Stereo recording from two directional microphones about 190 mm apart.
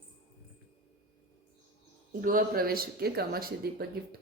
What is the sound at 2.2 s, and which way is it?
A woman's voice, 45° right (ahead or behind).